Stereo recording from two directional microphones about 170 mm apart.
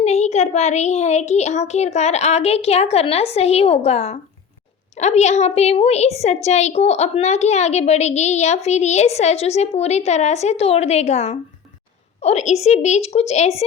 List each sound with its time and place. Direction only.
0.0 s a woman's voice: 40° left (ahead or behind)